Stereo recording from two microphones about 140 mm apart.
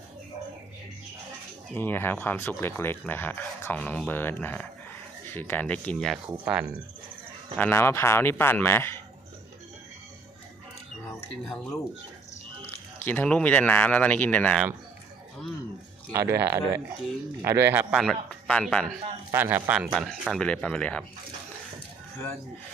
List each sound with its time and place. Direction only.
1.7 s speech: 15° left (ahead or behind); by 6.7 s 10° right (ahead or behind)
7.5 s speech: 15° left (ahead or behind)
13.1 s speech: 10° left (ahead or behind)
16.1 s speech: 20° right (ahead or behind)
17.9 s a man's voice: 5° left (ahead or behind)
19.3 s speech: 15° right (ahead or behind); by 21.0 s 10° left (ahead or behind)